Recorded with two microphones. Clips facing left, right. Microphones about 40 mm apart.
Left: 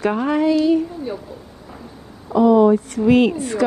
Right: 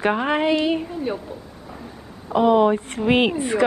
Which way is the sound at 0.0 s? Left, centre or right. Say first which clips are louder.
Left 2 dB; right.